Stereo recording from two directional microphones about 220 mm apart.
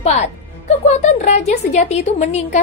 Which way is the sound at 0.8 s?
30° left (ahead or behind).